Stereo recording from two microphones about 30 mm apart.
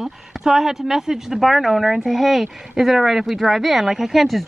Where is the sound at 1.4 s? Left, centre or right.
Centre.